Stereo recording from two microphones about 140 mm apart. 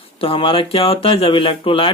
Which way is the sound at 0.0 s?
40° left (ahead or behind).